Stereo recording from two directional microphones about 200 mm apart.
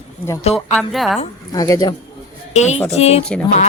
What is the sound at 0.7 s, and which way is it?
Speech, centre (ahead or behind).